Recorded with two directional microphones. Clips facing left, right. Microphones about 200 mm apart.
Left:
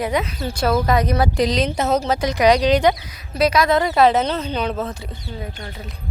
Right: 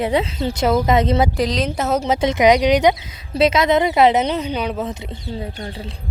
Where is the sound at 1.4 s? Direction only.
Centre (ahead or behind).